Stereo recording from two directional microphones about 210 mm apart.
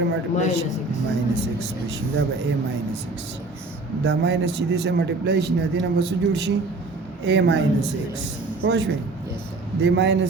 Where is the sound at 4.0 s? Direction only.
55° right (ahead or behind).